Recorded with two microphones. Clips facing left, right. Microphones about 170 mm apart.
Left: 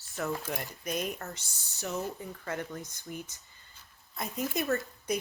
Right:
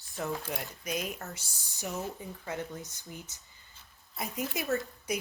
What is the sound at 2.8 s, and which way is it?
Speech, 15° left (ahead or behind).